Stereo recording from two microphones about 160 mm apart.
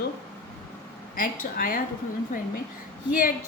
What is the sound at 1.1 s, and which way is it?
Speech, 60° left (ahead or behind).